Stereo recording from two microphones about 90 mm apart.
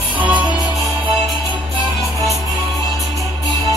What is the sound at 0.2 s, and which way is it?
Music, 15° right (ahead or behind).